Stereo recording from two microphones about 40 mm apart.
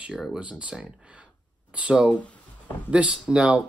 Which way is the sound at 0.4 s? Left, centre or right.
Right.